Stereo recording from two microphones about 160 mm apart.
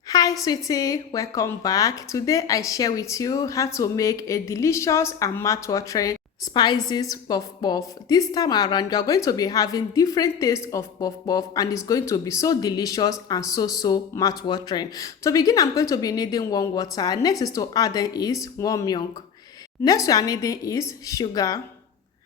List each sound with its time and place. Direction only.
0.1 s a woman's voice: 25° left (ahead or behind)